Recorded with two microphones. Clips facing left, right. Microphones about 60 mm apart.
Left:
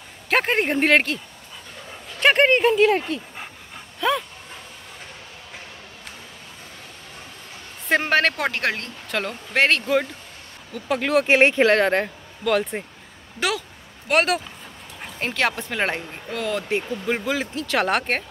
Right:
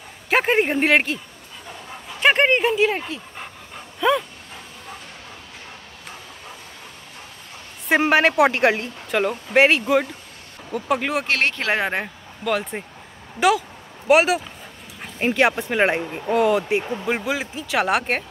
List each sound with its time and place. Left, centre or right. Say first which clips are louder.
0.3 s speech: right 2 dB; centre
2.1 s dog: even; centre
7.9 s speech: right 3 dB; centre
11.2 s speech: left 6 dB; centre
11.7 s speech: left 4 dB; centre